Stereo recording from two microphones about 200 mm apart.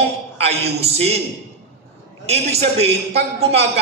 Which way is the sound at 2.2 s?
30° right (ahead or behind).